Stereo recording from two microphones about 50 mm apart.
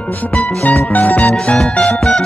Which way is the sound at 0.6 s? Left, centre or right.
Left.